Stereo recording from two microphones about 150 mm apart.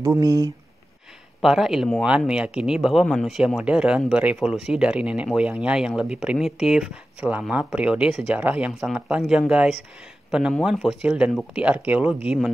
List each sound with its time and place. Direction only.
0.0 s speech: 20° right (ahead or behind)
1.4 s speech: centre (ahead or behind)
10.6 s speech: centre (ahead or behind)